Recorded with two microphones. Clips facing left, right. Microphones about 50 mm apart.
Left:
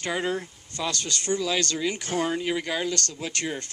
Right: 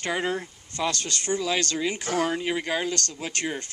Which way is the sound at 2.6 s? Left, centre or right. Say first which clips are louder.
Right 1 dB; right.